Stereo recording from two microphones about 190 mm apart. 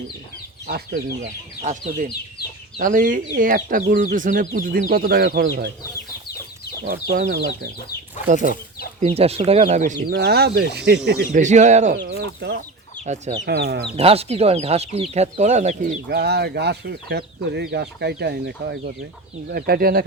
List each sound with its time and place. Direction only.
0.7 s speech: 55° right (ahead or behind)
6.8 s speech: 50° right (ahead or behind)
9.0 s speech: 30° right (ahead or behind)
10.1 s speech: 55° right (ahead or behind)
11.3 s speech: 40° right (ahead or behind)
11.9 s speech: 65° right (ahead or behind)
13.1 s speech: 40° right (ahead or behind)
13.4 s speech: 60° right (ahead or behind)
13.9 s speech: 30° right (ahead or behind)
16.0 s speech: 60° right (ahead or behind)